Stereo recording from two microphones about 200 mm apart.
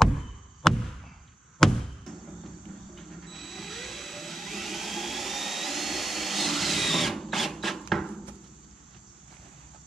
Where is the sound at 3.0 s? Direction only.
Centre (ahead or behind).